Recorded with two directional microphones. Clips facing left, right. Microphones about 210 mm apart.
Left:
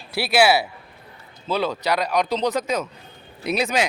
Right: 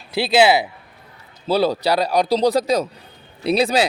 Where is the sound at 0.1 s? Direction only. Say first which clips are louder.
Right 3 dB; 20° right (ahead or behind).